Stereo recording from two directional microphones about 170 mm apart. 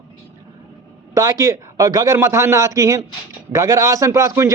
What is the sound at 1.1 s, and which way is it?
A man's voice, 20° right (ahead or behind).